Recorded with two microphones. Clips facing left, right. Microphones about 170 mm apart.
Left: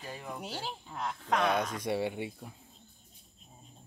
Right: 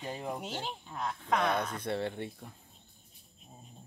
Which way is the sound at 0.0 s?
25° right (ahead or behind).